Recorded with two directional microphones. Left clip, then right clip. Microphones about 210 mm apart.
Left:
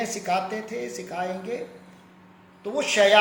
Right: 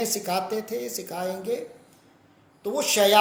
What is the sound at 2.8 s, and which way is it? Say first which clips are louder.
Speech: left 1 dB; 55° right (ahead or behind).